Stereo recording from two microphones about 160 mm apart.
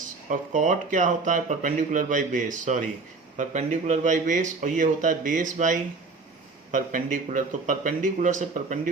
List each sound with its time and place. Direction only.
0.0 s speech: 55° right (ahead or behind)